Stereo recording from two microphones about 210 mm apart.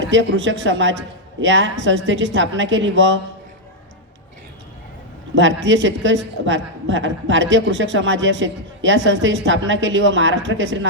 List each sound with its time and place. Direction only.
0.1 s a woman's voice: 60° right (ahead or behind)
5.3 s a woman's voice: 60° right (ahead or behind)